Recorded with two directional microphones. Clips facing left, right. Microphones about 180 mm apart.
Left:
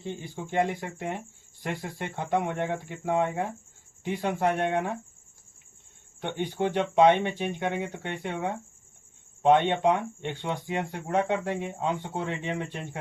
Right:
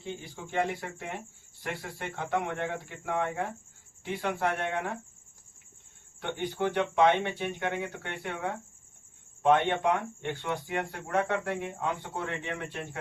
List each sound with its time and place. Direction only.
0.5 s speech: 15° left (ahead or behind)
6.2 s speech: 20° left (ahead or behind)